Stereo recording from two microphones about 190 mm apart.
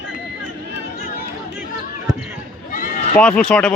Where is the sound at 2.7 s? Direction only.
45° left (ahead or behind).